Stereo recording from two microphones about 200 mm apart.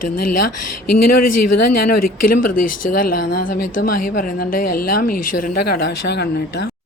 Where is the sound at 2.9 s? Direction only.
45° left (ahead or behind).